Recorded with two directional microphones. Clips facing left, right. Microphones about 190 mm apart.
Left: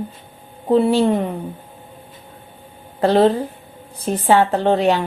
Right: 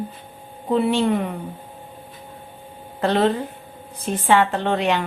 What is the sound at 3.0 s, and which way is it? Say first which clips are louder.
A woman's voice: left 5 dB; 35° left (ahead or behind).